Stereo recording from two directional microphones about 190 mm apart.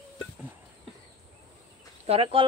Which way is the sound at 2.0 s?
30° right (ahead or behind).